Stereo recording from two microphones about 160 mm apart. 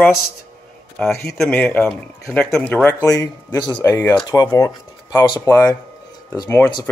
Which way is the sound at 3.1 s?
20° left (ahead or behind).